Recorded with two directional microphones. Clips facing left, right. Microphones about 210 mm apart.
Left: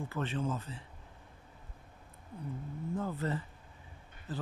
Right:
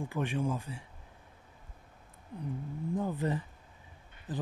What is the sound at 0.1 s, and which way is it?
Speech, 15° right (ahead or behind).